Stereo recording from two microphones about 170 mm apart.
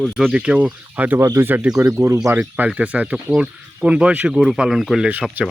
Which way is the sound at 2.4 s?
5° right (ahead or behind).